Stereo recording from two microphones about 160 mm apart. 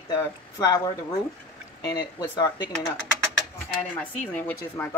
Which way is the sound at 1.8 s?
25° left (ahead or behind).